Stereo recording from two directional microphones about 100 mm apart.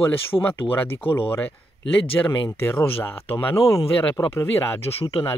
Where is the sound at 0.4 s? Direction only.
20° left (ahead or behind).